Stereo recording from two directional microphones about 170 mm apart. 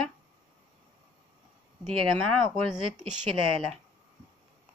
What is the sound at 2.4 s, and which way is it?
Speech, 5° right (ahead or behind).